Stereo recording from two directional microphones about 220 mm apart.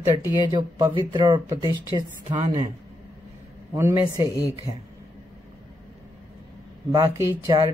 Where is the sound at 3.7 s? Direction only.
15° right (ahead or behind).